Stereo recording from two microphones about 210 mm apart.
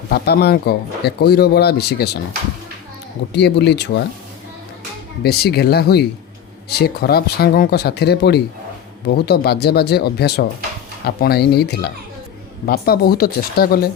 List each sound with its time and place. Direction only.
0.1 s speech: 50° left (ahead or behind)
3.3 s speech: 55° left (ahead or behind)
5.2 s speech: 50° left (ahead or behind)